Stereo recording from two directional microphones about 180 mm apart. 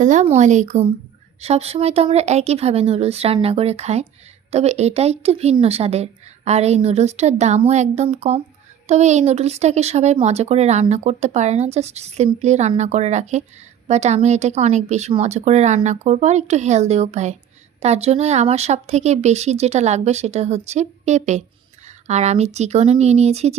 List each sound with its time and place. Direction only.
0.0 s speech: 40° right (ahead or behind)